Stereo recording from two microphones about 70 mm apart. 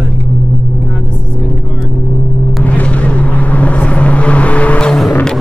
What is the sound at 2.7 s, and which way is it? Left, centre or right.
Vehicle, left.